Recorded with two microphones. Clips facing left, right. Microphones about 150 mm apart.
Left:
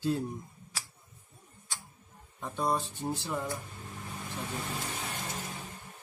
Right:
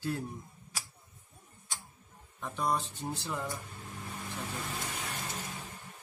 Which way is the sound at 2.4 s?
15° left (ahead or behind).